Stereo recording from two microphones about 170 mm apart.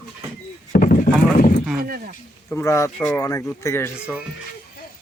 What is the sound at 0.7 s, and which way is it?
Horse, 50° left (ahead or behind).